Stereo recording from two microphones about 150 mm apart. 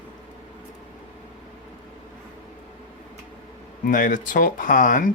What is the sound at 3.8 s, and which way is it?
Speech, 65° left (ahead or behind).